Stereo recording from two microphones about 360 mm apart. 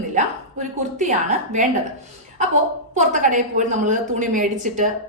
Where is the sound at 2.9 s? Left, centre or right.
Centre.